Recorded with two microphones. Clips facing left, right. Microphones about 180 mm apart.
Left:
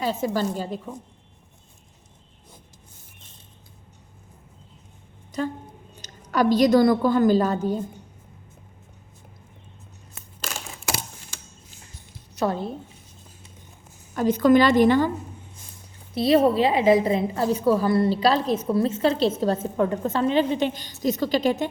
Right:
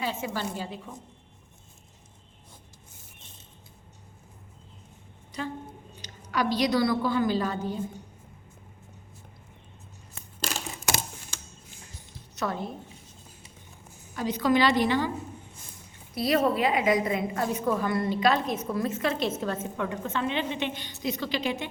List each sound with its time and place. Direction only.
0.0 s a woman's voice: 40° left (ahead or behind)
5.3 s a woman's voice: 45° left (ahead or behind)
10.4 s a sound: 35° right (ahead or behind)
12.4 s a woman's voice: 30° left (ahead or behind)
14.2 s a woman's voice: 50° left (ahead or behind)
16.1 s a woman's voice: 25° left (ahead or behind); by 21.7 s 40° left (ahead or behind)